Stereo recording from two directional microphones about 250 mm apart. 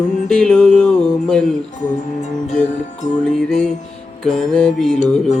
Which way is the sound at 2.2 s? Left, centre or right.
Left.